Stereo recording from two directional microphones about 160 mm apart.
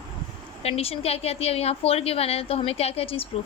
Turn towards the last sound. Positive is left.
turn(degrees=35)  # may be behind; listen again after turning